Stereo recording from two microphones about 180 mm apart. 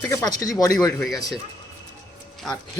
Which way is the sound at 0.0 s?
15° left (ahead or behind).